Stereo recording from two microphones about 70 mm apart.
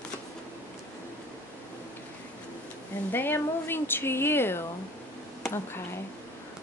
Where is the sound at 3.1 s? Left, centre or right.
Left.